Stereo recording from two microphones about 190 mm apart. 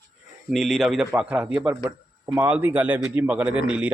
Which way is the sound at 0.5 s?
Centre (ahead or behind).